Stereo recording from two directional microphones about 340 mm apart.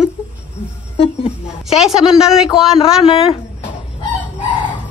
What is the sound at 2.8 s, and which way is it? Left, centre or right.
Speech, centre.